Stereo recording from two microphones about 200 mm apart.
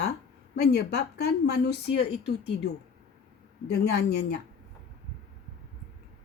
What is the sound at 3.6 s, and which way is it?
Speech, 55° left (ahead or behind).